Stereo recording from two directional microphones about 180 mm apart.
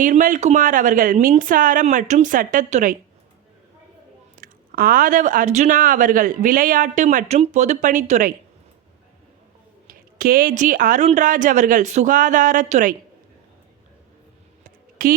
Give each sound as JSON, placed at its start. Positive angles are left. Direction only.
{"t": 0.0, "sound": "speech", "side_deg": -45}
{"t": 4.4, "sound": "speech", "side_deg": -55}
{"t": 9.8, "sound": "speech", "side_deg": -55}
{"t": 14.6, "sound": "a sound", "side_deg": -50}